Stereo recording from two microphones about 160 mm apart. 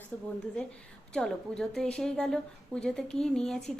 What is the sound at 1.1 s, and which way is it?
A woman's voice, 5° left (ahead or behind).